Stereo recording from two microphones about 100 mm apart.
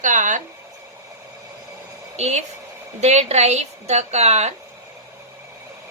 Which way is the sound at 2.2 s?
90° right.